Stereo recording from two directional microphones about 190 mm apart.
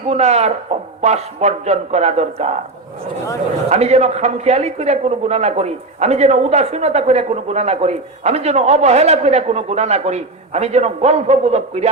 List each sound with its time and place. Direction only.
0.1 s speech: 35° right (ahead or behind)
3.7 s speech: 35° right (ahead or behind)